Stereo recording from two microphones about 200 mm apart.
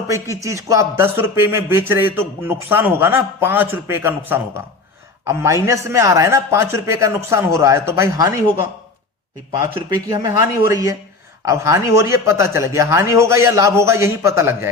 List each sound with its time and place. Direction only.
0.3 s a man's voice: 15° right (ahead or behind)
10.1 s speech: 15° right (ahead or behind)